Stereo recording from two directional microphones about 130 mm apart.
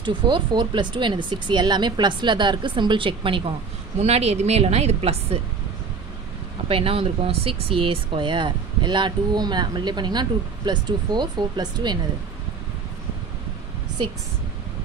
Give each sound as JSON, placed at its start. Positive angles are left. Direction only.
{"t": 0.0, "sound": "speech", "side_deg": -35}
{"t": 4.0, "sound": "a woman's voice", "side_deg": -55}
{"t": 6.7, "sound": "speech", "side_deg": -45}